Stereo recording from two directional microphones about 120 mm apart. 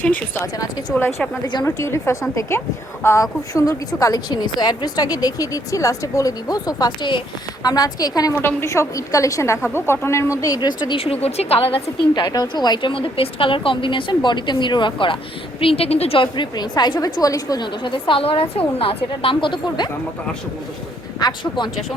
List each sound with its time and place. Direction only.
0.9 s a woman's voice: 20° left (ahead or behind); by 8.3 s 35° left (ahead or behind)
8.4 s a woman's voice: 20° left (ahead or behind); by 19.9 s 40° left (ahead or behind)
21.2 s a woman's voice: 35° left (ahead or behind)